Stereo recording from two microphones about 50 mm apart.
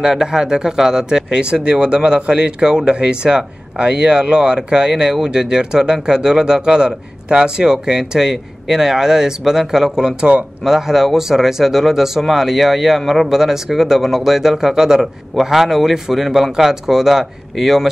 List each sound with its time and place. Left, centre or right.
0.0 s a man's voice: centre
10.6 s a man's voice: centre